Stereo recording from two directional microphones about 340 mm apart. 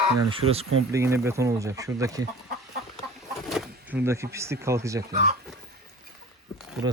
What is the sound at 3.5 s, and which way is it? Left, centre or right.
Speech, centre.